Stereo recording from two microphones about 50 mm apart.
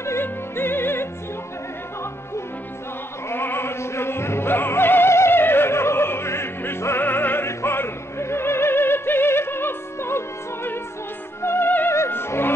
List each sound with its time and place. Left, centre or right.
0.2 s opera: left
3.3 s opera: left
7.0 s opera: left
11.4 s music: left